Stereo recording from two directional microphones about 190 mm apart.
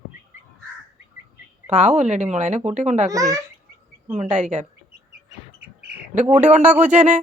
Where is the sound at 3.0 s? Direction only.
15° right (ahead or behind).